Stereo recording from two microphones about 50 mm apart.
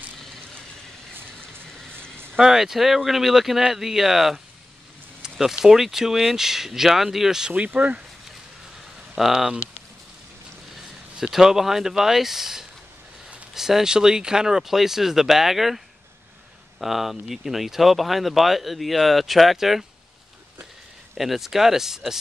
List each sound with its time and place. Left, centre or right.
2.0 s a sound: right
2.3 s speech: centre
7.5 s speech: right
9.1 s speech: centre
11.1 s speech: centre
16.8 s speech: centre
21.2 s speech: centre